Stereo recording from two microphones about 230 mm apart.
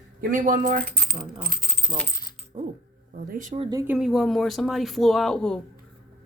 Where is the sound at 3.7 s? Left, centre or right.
Centre.